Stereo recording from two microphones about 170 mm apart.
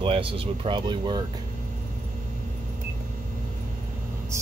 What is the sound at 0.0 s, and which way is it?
Speech, 30° right (ahead or behind).